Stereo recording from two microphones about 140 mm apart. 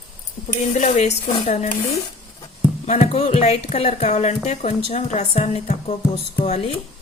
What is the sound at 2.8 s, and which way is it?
Speech, 50° left (ahead or behind).